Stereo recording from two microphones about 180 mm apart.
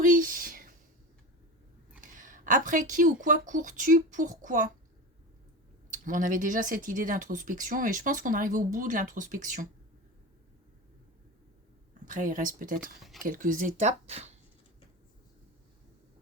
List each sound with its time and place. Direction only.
0.0 s a sound: 50° right (ahead or behind)
2.0 s speech: 45° right (ahead or behind)
5.9 s speech: 45° right (ahead or behind)
12.0 s speech: 45° right (ahead or behind)